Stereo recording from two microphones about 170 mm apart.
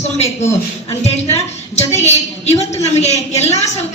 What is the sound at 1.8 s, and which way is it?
A man's voice, 40° left (ahead or behind).